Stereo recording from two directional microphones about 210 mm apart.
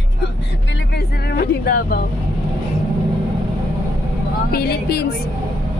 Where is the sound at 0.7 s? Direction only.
55° left (ahead or behind).